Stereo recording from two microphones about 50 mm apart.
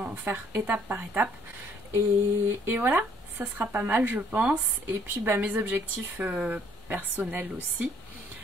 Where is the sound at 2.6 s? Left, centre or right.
Right.